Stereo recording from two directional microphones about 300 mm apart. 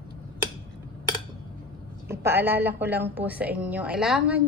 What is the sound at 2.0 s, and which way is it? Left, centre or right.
A woman's voice, centre.